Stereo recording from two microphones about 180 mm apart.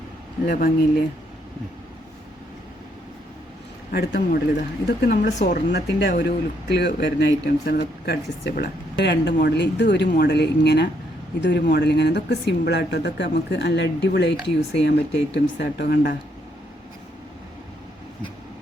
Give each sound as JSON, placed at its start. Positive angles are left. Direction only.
{"t": 0.4, "sound": "speech", "side_deg": 55}
{"t": 3.9, "sound": "speech", "side_deg": 65}